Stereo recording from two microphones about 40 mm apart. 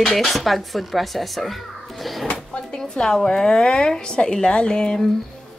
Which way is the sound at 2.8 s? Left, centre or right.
Centre.